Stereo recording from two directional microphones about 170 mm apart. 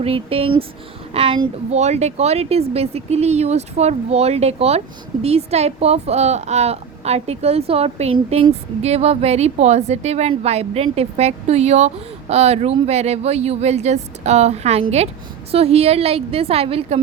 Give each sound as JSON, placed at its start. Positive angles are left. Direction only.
{"t": 0.0, "sound": "a woman's voice", "side_deg": -35}